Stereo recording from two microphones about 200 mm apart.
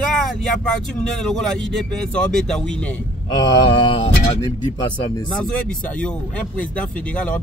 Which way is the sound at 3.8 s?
25° left (ahead or behind).